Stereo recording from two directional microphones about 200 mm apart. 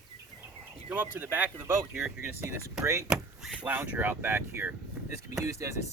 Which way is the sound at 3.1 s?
Centre (ahead or behind).